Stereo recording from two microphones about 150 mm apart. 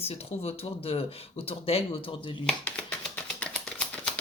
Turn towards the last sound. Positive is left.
turn(degrees=5)  # may be behind; listen again after turning